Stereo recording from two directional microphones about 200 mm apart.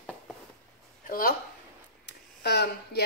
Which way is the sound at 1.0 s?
45° left (ahead or behind).